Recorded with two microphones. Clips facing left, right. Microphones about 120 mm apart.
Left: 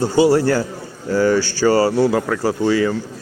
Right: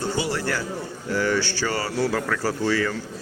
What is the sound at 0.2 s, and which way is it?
Speech, 30° left (ahead or behind).